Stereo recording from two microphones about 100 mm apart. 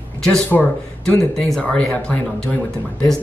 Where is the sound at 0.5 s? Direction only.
15° left (ahead or behind).